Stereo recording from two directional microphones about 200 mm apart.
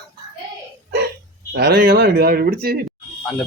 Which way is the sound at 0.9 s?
55° right (ahead or behind).